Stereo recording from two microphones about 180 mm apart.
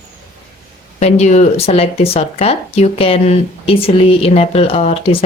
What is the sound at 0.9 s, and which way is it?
Speech, 40° left (ahead or behind).